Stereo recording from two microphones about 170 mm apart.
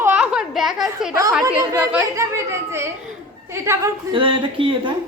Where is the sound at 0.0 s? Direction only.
5° right (ahead or behind).